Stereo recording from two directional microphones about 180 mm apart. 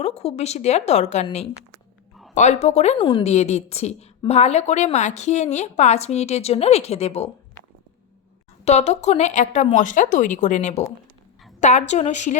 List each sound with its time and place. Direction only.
0.0 s a woman's voice: 35° left (ahead or behind)
3.0 s a woman's voice: 25° left (ahead or behind)
8.6 s a woman's voice: 40° left (ahead or behind)